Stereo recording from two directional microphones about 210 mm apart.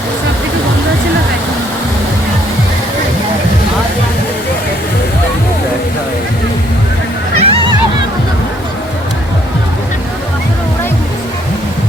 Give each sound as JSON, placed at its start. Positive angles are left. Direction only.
{"t": 7.3, "sound": "music", "side_deg": -25}